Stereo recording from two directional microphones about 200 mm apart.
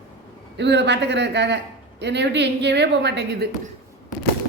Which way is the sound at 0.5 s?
60° right (ahead or behind).